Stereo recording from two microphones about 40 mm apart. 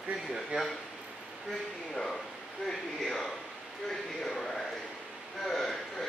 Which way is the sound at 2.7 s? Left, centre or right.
Centre.